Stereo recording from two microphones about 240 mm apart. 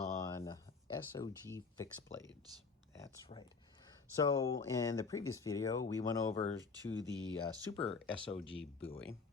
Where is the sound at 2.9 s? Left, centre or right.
Centre.